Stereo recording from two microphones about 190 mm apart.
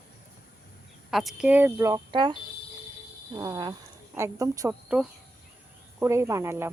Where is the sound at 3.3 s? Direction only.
20° right (ahead or behind).